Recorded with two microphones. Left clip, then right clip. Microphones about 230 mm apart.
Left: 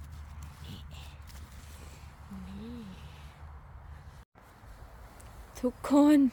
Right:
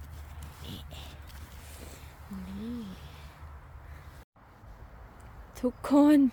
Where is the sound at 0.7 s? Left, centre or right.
Right.